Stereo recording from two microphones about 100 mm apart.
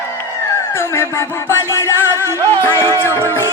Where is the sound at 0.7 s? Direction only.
25° left (ahead or behind).